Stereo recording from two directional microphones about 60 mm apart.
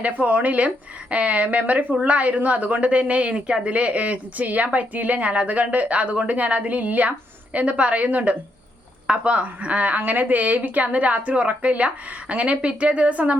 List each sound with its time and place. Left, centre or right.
0.0 s speech: right